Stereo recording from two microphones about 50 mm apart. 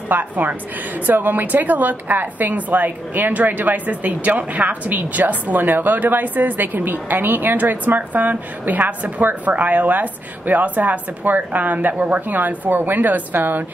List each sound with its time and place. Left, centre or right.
0.1 s a woman's voice: right